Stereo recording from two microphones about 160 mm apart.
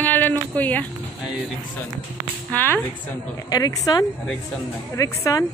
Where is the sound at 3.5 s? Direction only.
20° left (ahead or behind).